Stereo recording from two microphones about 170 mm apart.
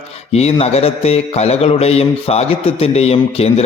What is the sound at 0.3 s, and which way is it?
A man's voice, 35° left (ahead or behind).